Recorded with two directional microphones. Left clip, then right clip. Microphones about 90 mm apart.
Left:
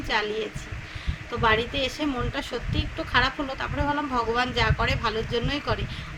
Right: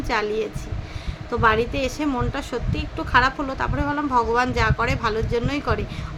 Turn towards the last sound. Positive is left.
turn(degrees=-35)  # may be behind; listen again after turning